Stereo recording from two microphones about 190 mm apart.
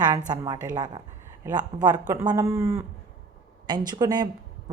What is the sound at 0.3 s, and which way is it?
Speech, 20° right (ahead or behind).